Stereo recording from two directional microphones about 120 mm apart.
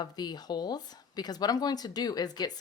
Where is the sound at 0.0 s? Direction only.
35° left (ahead or behind).